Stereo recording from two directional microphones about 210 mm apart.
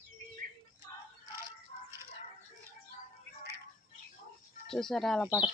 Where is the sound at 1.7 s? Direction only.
30° left (ahead or behind).